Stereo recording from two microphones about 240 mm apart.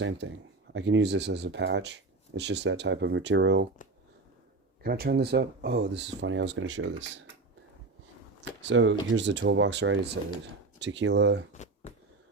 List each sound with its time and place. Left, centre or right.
0.0 s speech: right
4.8 s speech: right
8.6 s speech: right
11.5 s a sound: left